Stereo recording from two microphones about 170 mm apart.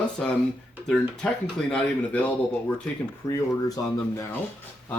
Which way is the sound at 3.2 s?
20° left (ahead or behind).